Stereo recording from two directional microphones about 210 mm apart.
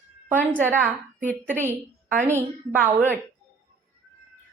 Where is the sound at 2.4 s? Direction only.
10° right (ahead or behind).